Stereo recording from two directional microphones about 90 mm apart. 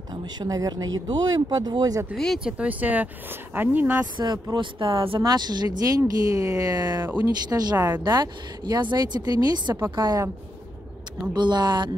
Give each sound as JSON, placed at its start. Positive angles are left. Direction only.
{"t": 0.1, "sound": "speech", "side_deg": -55}
{"t": 2.1, "sound": "speech", "side_deg": 5}
{"t": 2.4, "sound": "speech", "side_deg": -15}
{"t": 4.2, "sound": "speech", "side_deg": -50}
{"t": 5.2, "sound": "speech", "side_deg": -50}
{"t": 7.7, "sound": "speech", "side_deg": -20}
{"t": 8.0, "sound": "speech", "side_deg": -50}
{"t": 11.3, "sound": "speech", "side_deg": -55}